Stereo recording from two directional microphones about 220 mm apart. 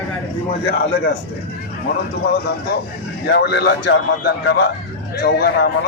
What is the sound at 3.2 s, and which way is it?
A man's voice, 50° left (ahead or behind).